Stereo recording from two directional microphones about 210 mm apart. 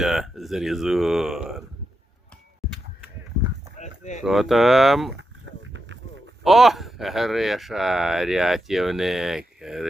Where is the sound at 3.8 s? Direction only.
35° left (ahead or behind).